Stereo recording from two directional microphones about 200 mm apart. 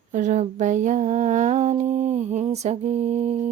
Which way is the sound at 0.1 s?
35° right (ahead or behind).